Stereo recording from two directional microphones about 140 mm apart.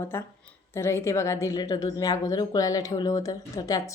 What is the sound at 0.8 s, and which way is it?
A woman's voice, 20° left (ahead or behind).